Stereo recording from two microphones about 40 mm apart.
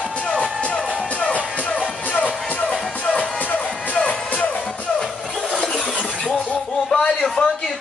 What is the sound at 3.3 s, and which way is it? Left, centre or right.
Music, left.